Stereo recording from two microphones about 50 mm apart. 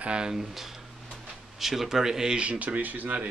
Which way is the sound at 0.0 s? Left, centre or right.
Centre.